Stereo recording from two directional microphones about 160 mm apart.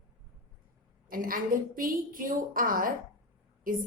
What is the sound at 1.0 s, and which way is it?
A woman's voice, 60° right (ahead or behind).